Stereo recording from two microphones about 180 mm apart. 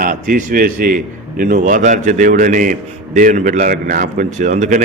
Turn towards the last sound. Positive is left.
turn(degrees=-45)  # may be behind; listen again after turning